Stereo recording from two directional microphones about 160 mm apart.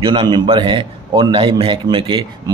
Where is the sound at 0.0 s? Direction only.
30° right (ahead or behind).